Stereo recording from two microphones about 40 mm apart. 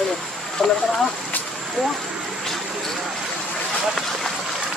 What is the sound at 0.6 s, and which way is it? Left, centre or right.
Speech, centre.